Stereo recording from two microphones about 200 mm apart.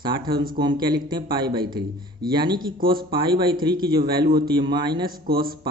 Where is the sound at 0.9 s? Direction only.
20° right (ahead or behind).